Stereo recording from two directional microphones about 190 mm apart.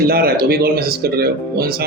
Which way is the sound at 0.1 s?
55° right (ahead or behind).